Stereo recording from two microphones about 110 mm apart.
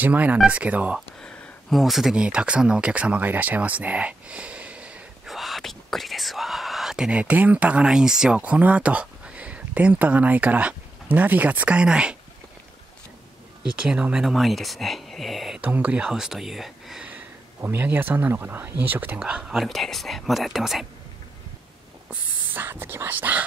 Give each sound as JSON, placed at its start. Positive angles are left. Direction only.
{"t": 0.0, "sound": "speech", "side_deg": -15}
{"t": 0.9, "sound": "speech", "side_deg": 5}
{"t": 5.3, "sound": "speech", "side_deg": 0}
{"t": 13.7, "sound": "speech", "side_deg": -10}
{"t": 15.6, "sound": "speech", "side_deg": -15}
{"t": 17.6, "sound": "speech", "side_deg": -20}
{"t": 22.1, "sound": "speech", "side_deg": -15}